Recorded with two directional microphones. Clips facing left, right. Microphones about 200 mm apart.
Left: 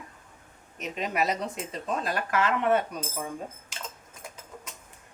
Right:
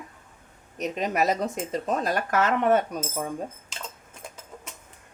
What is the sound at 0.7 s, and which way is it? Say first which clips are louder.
Speech: right 4 dB; 40° right (ahead or behind).